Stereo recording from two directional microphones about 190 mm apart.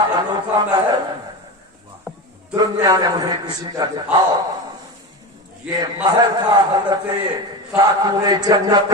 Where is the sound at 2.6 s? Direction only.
20° right (ahead or behind).